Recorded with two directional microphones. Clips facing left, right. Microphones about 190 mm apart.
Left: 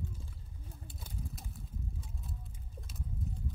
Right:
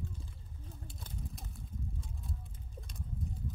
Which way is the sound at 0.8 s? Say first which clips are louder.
Left 1 dB; 5° left (ahead or behind).